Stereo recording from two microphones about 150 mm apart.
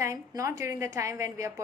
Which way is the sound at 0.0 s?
20° right (ahead or behind).